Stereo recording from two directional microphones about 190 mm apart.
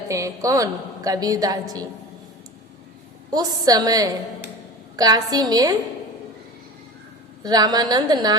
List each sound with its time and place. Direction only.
0.1 s a woman's voice: 15° right (ahead or behind)
3.3 s a woman's voice: 20° right (ahead or behind)
7.4 s a woman's voice: 20° right (ahead or behind)